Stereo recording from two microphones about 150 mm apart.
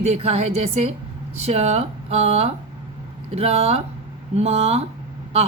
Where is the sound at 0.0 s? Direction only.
45° right (ahead or behind).